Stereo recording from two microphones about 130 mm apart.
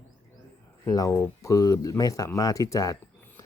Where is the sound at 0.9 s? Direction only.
25° left (ahead or behind).